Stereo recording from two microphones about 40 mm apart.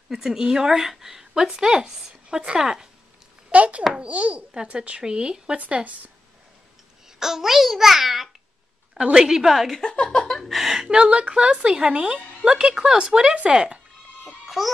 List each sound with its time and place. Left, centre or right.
0.1 s a woman's voice: centre
3.5 s speech: right
5.0 s speech: right
5.6 s speech: right
7.1 s a woman's voice: centre
10.0 s a sound: centre
10.4 s a woman's voice: centre
10.9 s a woman's voice: right
14.2 s music: centre